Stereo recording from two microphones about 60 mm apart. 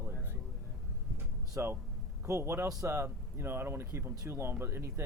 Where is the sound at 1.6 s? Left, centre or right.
Right.